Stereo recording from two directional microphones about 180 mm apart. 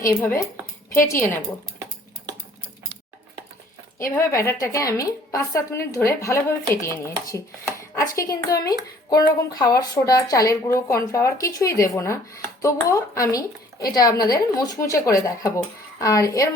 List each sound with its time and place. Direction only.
0.2 s speech: 10° left (ahead or behind)
3.9 s speech: 15° left (ahead or behind)